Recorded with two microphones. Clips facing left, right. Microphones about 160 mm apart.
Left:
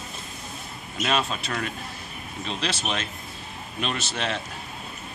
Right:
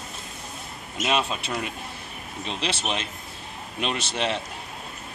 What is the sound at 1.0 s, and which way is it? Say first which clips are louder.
Speech: right 1 dB; 10° right (ahead or behind).